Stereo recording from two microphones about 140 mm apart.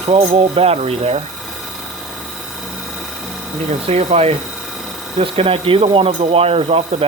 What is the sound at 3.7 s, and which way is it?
Speech, 50° right (ahead or behind).